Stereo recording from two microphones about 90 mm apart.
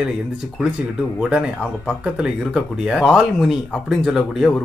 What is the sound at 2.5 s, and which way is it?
Speech, 5° right (ahead or behind).